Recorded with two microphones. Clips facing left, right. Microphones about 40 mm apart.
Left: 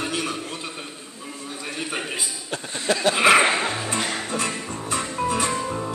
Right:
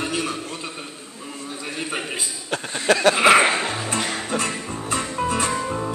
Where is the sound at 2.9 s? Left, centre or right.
Right.